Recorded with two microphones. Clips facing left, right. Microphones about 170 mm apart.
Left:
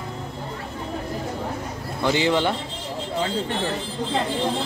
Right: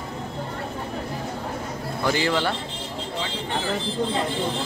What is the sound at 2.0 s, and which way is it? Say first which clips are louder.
Speech: left 3 dB; 20° left (ahead or behind).